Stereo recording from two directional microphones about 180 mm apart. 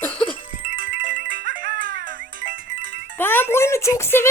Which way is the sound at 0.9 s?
85° right.